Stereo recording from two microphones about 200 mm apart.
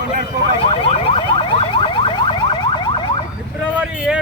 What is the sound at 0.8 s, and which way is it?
Car alarm, 25° left (ahead or behind).